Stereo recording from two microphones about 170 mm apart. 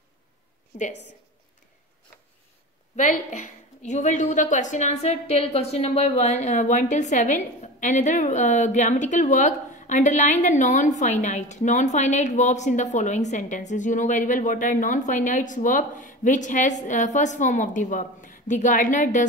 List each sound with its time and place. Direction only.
3.0 s a woman's voice: 45° left (ahead or behind)